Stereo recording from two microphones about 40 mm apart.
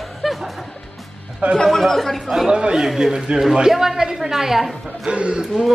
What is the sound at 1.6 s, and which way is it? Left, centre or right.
Speech, centre.